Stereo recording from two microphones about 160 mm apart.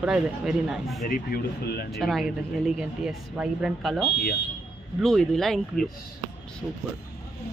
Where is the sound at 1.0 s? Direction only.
70° left (ahead or behind).